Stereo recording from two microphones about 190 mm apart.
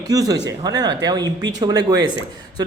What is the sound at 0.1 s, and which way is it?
Speech, 20° right (ahead or behind).